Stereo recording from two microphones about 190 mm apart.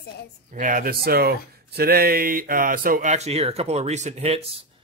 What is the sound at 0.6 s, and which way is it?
Speech, 45° right (ahead or behind).